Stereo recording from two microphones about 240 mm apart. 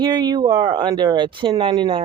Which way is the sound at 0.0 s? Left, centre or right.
Centre.